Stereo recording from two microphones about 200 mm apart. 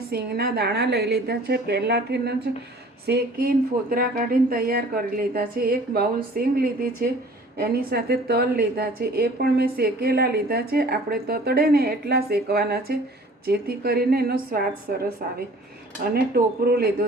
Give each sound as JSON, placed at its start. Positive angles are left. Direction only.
{"t": 0.1, "sound": "a woman's voice", "side_deg": -50}
{"t": 16.1, "sound": "a woman's voice", "side_deg": -50}